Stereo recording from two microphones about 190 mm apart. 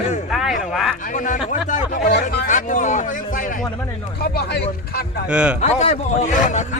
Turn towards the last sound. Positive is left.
turn(degrees=40)  # may be behind; listen again after turning